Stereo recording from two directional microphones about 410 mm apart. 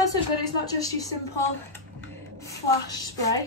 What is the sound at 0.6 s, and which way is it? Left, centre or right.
Speech, centre.